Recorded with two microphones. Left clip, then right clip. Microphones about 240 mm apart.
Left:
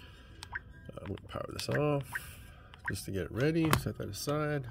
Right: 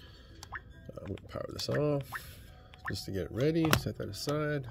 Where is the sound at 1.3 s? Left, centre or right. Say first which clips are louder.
Right 1 dB; centre.